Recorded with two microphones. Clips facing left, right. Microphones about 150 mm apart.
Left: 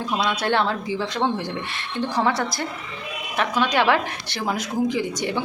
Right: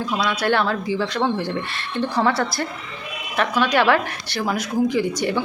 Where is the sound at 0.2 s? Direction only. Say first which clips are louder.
Right 1 dB; 25° left (ahead or behind).